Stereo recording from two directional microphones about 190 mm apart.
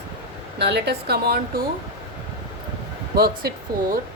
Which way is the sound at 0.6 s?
60° right (ahead or behind).